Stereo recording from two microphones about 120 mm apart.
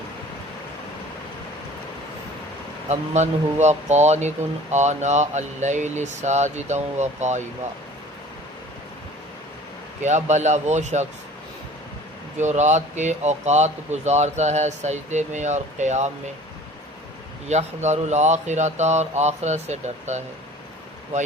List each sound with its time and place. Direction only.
2.9 s speech: 70° right (ahead or behind)
10.0 s speech: 80° right
12.4 s speech: 75° right (ahead or behind)
17.5 s speech: 70° right (ahead or behind)